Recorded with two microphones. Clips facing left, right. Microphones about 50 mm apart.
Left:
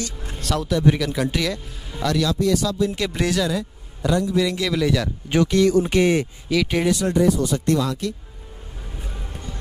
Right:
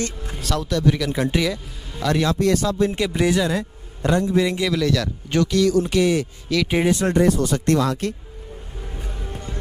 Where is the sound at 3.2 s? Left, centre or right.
Centre.